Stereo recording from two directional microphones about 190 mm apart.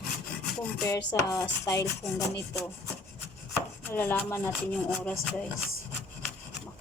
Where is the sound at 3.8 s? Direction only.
10° left (ahead or behind).